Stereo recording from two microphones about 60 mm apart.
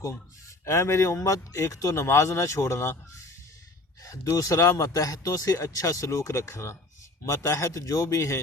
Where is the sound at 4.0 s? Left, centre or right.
Left.